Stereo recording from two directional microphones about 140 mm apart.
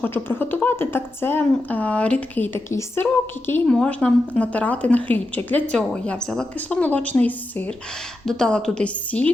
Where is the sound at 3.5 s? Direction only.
5° left (ahead or behind).